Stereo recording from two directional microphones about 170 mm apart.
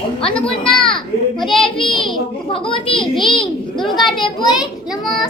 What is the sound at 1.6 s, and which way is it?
A child's voice, 30° left (ahead or behind).